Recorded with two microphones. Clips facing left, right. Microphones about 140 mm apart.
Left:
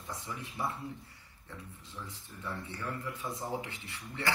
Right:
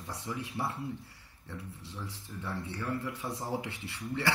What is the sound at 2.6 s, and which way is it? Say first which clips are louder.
A man's voice: right 6 dB; 75° right (ahead or behind).